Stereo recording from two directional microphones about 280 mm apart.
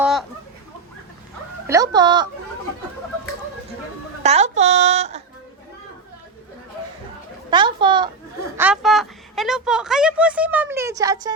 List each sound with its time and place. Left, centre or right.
0.0 s chicken: centre
1.6 s speech: centre
4.2 s a woman's voice: right
7.5 s speech: centre
8.5 s a woman's voice: centre